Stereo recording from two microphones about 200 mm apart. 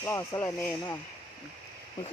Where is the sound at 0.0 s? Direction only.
15° left (ahead or behind).